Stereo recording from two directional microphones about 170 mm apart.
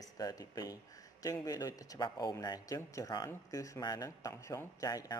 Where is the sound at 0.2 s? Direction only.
20° left (ahead or behind).